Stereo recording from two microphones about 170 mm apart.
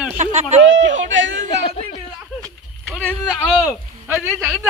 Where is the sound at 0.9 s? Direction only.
90° right.